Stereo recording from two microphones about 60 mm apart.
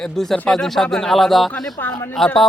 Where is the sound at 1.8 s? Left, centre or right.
Left.